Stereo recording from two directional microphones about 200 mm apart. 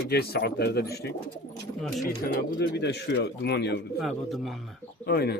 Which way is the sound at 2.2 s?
45° left (ahead or behind).